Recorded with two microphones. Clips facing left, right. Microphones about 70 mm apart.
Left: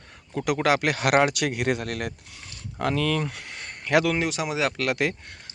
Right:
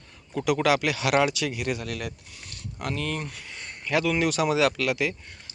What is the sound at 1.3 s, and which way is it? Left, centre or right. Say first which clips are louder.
Speech: left 4 dB; left.